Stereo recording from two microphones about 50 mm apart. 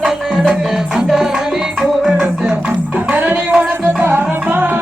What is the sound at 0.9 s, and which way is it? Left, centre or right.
Music, centre.